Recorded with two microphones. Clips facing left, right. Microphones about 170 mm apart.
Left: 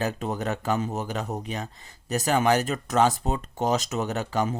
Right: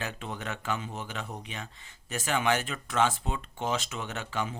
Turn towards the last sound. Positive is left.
turn(degrees=40)  # may be behind; listen again after turning